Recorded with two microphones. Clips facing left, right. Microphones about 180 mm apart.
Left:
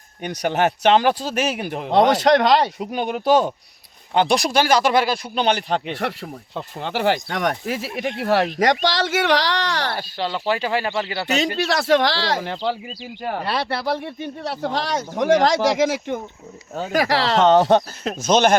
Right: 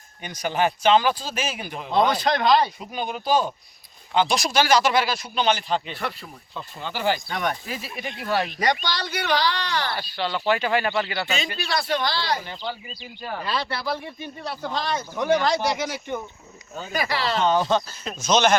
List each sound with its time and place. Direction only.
0.2 s speech: 65° left (ahead or behind)
8.5 s speech: 90° left
9.9 s speech: 40° left (ahead or behind)
11.5 s speech: 85° left
13.2 s speech: 65° left (ahead or behind)